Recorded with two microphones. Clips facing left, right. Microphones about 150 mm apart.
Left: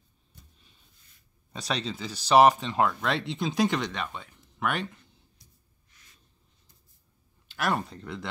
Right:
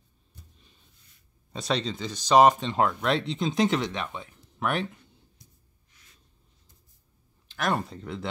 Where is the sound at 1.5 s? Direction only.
Centre (ahead or behind).